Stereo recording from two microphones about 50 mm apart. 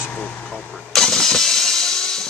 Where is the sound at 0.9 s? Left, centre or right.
Centre.